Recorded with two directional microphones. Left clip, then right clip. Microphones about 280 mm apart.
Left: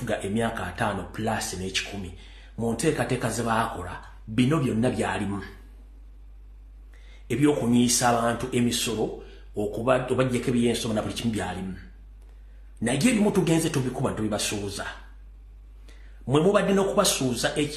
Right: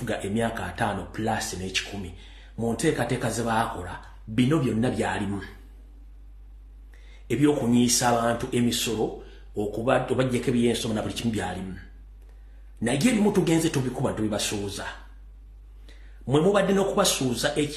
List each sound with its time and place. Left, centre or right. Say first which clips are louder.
0.0 s speech: even; centre
7.1 s a sound: even; centre
7.7 s speech: even; centre
12.8 s a man's voice: even; centre